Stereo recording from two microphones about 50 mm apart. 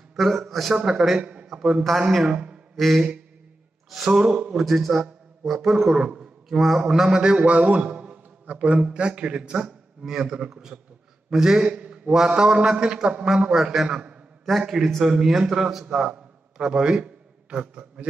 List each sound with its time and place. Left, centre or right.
0.1 s a man's voice: centre
0.7 s a man's voice: centre
1.2 s a sound: right
1.9 s a man's voice: centre
2.3 s a sound: centre
2.7 s a sound: centre
3.9 s a man's voice: centre
4.6 s a man's voice: centre
5.9 s a man's voice: centre
6.5 s a man's voice: centre
14.6 s a man's voice: centre
15.9 s a sound: centre